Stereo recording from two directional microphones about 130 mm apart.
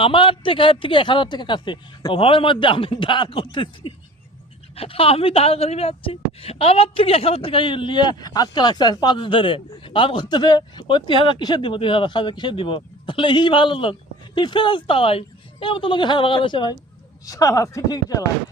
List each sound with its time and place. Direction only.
0.0 s a woman's voice: 40° left (ahead or behind)